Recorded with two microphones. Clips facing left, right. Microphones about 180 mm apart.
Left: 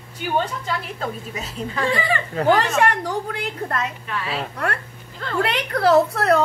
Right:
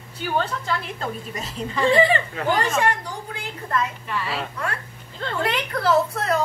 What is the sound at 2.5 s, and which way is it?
A woman's voice, 70° left (ahead or behind).